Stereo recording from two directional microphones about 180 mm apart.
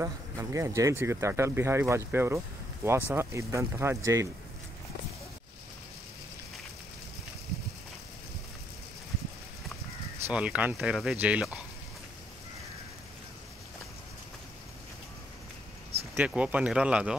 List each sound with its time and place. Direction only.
0.0 s speech: 15° right (ahead or behind)
10.2 s speech: 5° right (ahead or behind)
16.3 s speech: 5° right (ahead or behind)